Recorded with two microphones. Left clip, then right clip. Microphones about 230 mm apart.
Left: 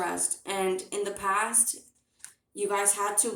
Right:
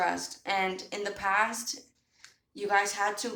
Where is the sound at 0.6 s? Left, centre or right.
Right.